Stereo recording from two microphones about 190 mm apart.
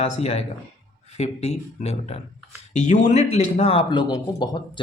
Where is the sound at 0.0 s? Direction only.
35° left (ahead or behind).